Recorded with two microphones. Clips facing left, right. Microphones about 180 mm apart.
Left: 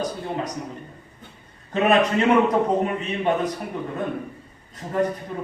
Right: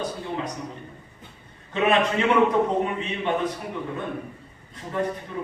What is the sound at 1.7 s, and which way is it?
A man's voice, 40° left (ahead or behind).